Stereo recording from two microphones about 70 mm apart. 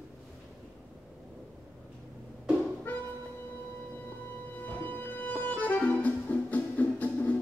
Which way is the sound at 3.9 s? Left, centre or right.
Left.